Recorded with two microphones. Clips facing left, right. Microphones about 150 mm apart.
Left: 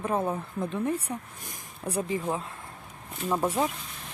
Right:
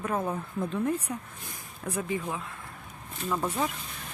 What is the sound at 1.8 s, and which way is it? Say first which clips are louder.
Speech: left 2 dB; 35° left (ahead or behind).